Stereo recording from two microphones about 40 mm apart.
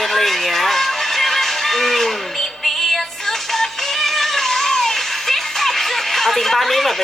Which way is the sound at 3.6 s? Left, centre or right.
Centre.